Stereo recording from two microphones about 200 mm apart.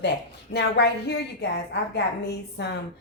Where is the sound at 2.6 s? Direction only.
60° left (ahead or behind).